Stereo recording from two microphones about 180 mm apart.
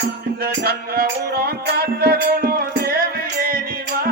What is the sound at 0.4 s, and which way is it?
Music, 60° right (ahead or behind).